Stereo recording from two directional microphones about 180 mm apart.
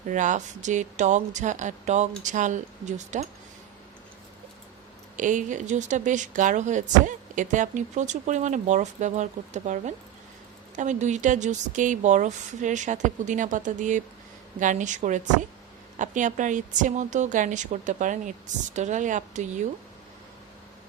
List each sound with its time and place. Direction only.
0.1 s speech: 45° right (ahead or behind)
5.1 s speech: 45° right (ahead or behind)